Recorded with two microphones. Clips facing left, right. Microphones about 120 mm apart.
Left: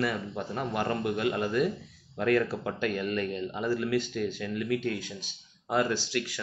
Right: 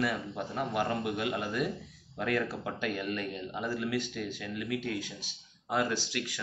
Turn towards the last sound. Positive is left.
turn(degrees=-15)  # may be behind; listen again after turning